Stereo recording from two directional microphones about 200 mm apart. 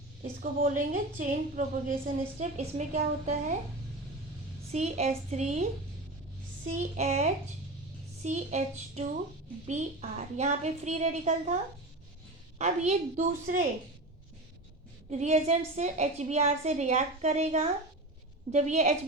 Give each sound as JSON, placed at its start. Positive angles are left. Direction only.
{"t": 0.2, "sound": "a woman's voice", "side_deg": -45}
{"t": 4.7, "sound": "a woman's voice", "side_deg": -35}
{"t": 6.7, "sound": "a woman's voice", "side_deg": -35}
{"t": 9.6, "sound": "a woman's voice", "side_deg": -35}
{"t": 12.5, "sound": "a woman's voice", "side_deg": -35}
{"t": 15.1, "sound": "a woman's voice", "side_deg": -35}